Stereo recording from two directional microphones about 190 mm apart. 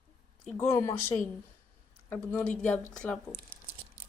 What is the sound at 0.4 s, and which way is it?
Speech, 10° left (ahead or behind).